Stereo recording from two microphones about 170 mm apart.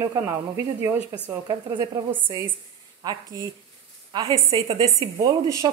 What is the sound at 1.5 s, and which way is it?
A woman's voice, 25° right (ahead or behind).